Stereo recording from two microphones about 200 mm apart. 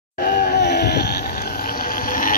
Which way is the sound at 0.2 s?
50° left (ahead or behind).